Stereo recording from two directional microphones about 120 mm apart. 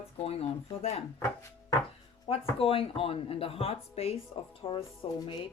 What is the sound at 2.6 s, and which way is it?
Speech, 50° left (ahead or behind).